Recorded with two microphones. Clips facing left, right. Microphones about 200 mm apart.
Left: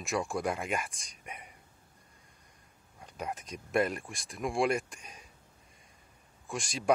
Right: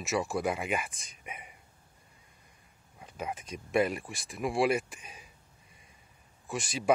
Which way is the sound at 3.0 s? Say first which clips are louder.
Right 1 dB; centre (ahead or behind).